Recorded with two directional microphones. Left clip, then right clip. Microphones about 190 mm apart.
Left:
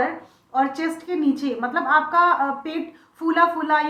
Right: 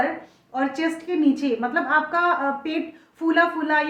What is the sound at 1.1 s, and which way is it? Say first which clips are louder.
A woman's voice: right 2 dB; 40° right (ahead or behind).